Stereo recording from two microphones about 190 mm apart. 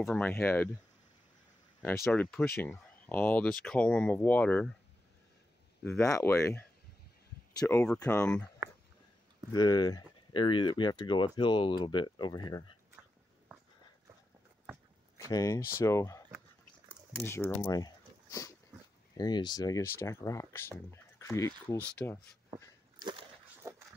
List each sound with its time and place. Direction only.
0.0 s speech: 5° left (ahead or behind)
2.6 s speech: 10° left (ahead or behind)
5.9 s speech: 15° left (ahead or behind)
9.5 s speech: 20° left (ahead or behind)
15.1 s speech: 15° left (ahead or behind)
17.2 s speech: 15° left (ahead or behind)
22.9 s whip: 25° right (ahead or behind)
23.6 s a sound: 15° right (ahead or behind)